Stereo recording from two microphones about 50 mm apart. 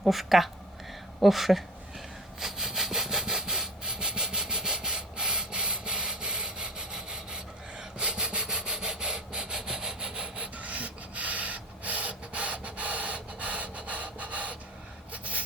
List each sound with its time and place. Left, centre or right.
0.0 s speech: centre
2.4 s sawing: centre
10.3 s rub: right
15.1 s a sound: right